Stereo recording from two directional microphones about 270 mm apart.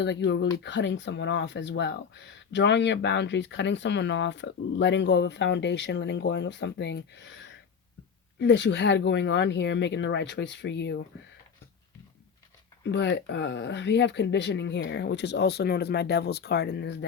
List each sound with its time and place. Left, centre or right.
0.0 s speech: left
8.4 s speech: left
12.8 s speech: left